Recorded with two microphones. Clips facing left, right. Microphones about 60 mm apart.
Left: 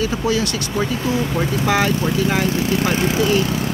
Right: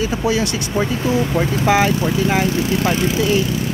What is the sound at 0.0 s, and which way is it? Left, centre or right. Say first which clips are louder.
Speech: right 1 dB; centre.